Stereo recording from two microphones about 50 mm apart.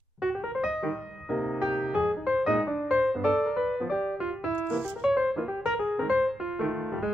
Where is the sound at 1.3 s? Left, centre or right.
Centre.